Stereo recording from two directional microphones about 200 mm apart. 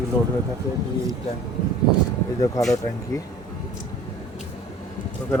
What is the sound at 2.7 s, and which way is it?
Speech, 15° left (ahead or behind).